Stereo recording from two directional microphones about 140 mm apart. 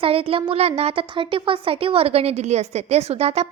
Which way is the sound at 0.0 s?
40° right (ahead or behind).